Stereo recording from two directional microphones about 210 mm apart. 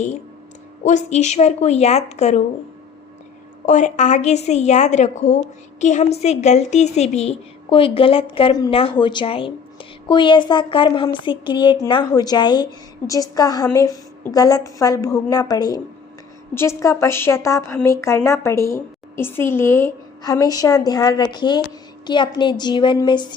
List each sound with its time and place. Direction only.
0.9 s a woman's voice: 35° left (ahead or behind)
3.7 s a woman's voice: 35° left (ahead or behind)